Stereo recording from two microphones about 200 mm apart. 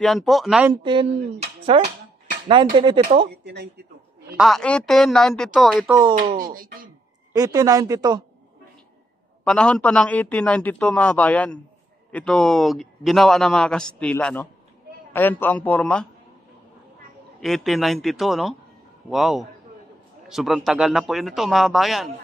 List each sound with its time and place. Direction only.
0.0 s speech: centre (ahead or behind)
1.7 s speech: 25° right (ahead or behind)
4.4 s speech: centre (ahead or behind)
5.9 s a woman's voice: 15° right (ahead or behind)
6.1 s speech: 45° right (ahead or behind)
7.3 s a woman's voice: 15° right (ahead or behind)
9.4 s a man's voice: 5° left (ahead or behind)
17.4 s speech: centre (ahead or behind)